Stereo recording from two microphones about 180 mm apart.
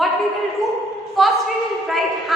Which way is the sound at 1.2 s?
Centre (ahead or behind).